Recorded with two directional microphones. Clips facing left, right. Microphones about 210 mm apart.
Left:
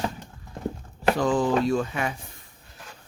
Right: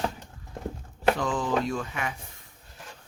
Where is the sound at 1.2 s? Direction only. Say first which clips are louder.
Left 5 dB; 35° left (ahead or behind).